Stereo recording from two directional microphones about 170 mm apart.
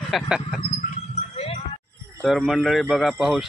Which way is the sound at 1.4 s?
35° left (ahead or behind).